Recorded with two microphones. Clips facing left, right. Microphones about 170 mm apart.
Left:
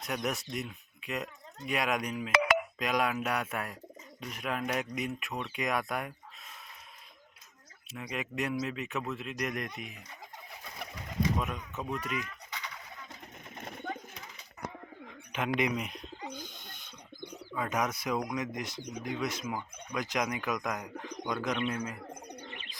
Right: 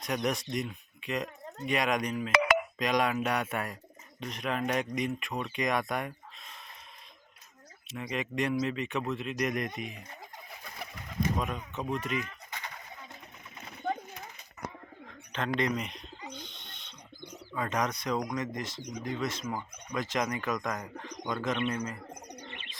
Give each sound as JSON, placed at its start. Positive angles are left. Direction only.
{"t": 0.0, "sound": "speech", "side_deg": 5}
{"t": 2.3, "sound": "telephone dialing", "side_deg": -55}
{"t": 2.7, "sound": "speech", "side_deg": 5}
{"t": 7.9, "sound": "speech", "side_deg": 5}
{"t": 11.3, "sound": "speech", "side_deg": 5}
{"t": 14.1, "sound": "a sound", "side_deg": -50}
{"t": 15.0, "sound": "bird", "side_deg": 10}
{"t": 16.4, "sound": "a sound", "side_deg": 0}
{"t": 17.3, "sound": "speech", "side_deg": 5}
{"t": 22.4, "sound": "bird", "side_deg": 5}